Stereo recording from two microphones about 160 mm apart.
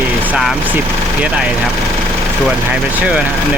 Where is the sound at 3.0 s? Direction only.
5° right (ahead or behind).